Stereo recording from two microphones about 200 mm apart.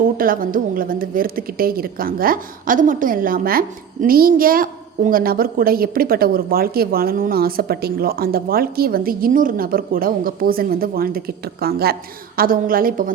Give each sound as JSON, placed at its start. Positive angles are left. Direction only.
{"t": 0.0, "sound": "a woman's voice", "side_deg": -45}